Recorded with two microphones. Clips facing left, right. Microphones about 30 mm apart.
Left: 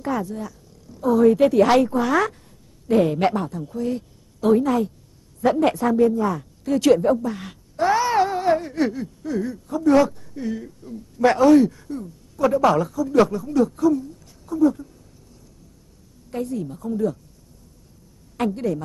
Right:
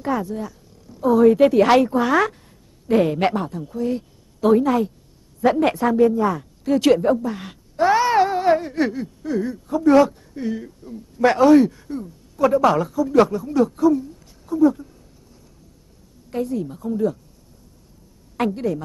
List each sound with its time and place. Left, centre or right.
0.0 s speech: centre
2.9 s a woman's voice: centre
11.9 s a sound: centre
12.5 s a woman's voice: centre
16.3 s a woman's voice: centre
18.4 s a woman's voice: centre